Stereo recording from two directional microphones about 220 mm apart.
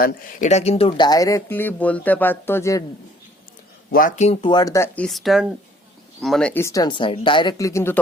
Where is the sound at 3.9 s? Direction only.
35° left (ahead or behind).